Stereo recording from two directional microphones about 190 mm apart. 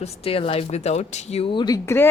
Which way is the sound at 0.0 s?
30° left (ahead or behind).